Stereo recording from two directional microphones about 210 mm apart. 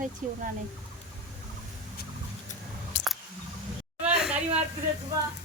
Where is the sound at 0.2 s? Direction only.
40° right (ahead or behind).